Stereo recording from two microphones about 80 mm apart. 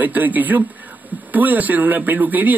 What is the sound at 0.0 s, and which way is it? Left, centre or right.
A man's voice, right.